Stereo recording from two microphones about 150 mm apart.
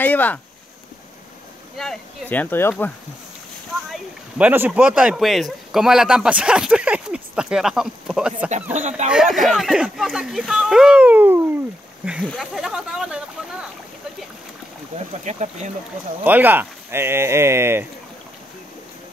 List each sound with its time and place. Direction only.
0.0 s speech: 10° left (ahead or behind)
1.8 s speech: centre (ahead or behind)
3.9 s speech: 10° right (ahead or behind)
8.7 s speech: 50° right (ahead or behind)
9.1 s speech: centre (ahead or behind)
15.0 s speech: 50° right (ahead or behind)
16.3 s speech: 10° right (ahead or behind)